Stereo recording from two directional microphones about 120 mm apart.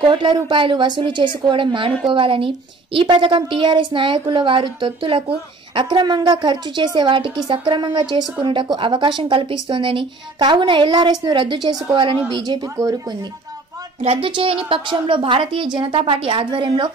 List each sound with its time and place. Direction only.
0.0 s a woman's voice: 40° right (ahead or behind)
14.0 s a woman's voice: 50° right (ahead or behind)